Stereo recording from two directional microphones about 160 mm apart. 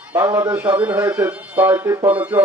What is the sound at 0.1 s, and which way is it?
A man's voice, 15° right (ahead or behind).